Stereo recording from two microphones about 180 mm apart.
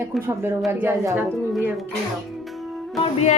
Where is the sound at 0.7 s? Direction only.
15° right (ahead or behind).